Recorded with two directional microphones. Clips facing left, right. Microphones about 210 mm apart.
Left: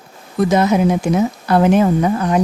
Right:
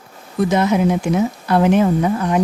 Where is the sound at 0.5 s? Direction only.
40° left (ahead or behind).